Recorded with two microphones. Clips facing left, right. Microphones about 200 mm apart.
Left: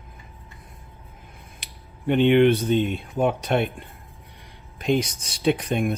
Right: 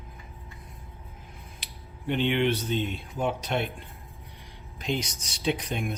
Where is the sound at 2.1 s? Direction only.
55° left (ahead or behind).